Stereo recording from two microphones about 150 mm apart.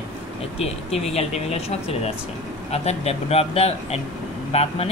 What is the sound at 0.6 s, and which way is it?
Speech, 45° left (ahead or behind).